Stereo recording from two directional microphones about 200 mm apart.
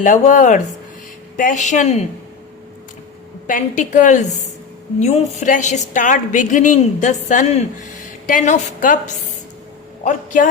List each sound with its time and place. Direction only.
0.0 s a woman's voice: 40° left (ahead or behind)
3.4 s a woman's voice: 40° left (ahead or behind)
10.0 s a woman's voice: 40° left (ahead or behind)